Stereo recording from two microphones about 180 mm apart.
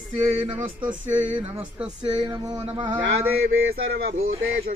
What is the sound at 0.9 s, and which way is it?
Speech, 10° right (ahead or behind).